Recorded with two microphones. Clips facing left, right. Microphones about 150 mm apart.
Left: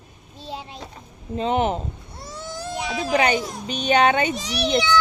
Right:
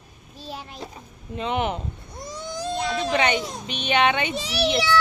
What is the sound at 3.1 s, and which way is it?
A woman's voice, 35° left (ahead or behind).